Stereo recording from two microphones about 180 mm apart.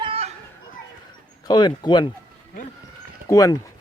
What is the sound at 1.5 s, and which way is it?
Speech, 25° left (ahead or behind).